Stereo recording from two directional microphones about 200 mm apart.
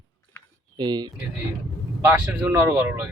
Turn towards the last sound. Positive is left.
turn(degrees=-10)  # may be behind; listen again after turning